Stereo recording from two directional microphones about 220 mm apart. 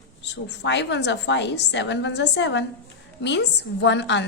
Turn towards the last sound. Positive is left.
turn(degrees=55)  # may be behind; listen again after turning